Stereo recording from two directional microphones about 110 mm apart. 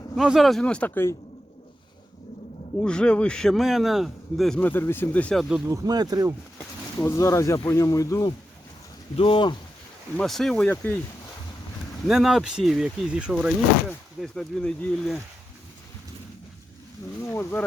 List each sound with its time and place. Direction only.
0.2 s speech: centre (ahead or behind); by 1.1 s 20° left (ahead or behind)
2.8 s speech: 10° left (ahead or behind)
4.6 s speech: 20° left (ahead or behind)
5.3 s speech: centre (ahead or behind)
5.7 s speech: 35° right (ahead or behind)
7.0 s speech: 25° left (ahead or behind)
9.1 s speech: 50° left (ahead or behind)
10.2 s speech: 5° left (ahead or behind)
10.7 s speech: 15° left (ahead or behind)
12.0 s speech: 5° right (ahead or behind)
14.2 s speech: 5° left (ahead or behind)
17.2 s speech: 20° left (ahead or behind)